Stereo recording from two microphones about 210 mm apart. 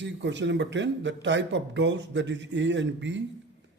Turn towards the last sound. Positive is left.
turn(degrees=-60)  # may be behind; listen again after turning